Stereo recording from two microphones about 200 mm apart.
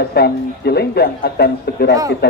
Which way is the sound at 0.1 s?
55° left (ahead or behind).